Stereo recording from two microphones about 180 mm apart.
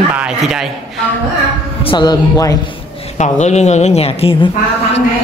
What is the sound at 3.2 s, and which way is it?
Speech, 40° left (ahead or behind).